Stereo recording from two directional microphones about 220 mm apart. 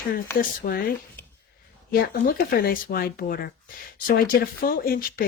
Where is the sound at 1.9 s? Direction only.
40° left (ahead or behind).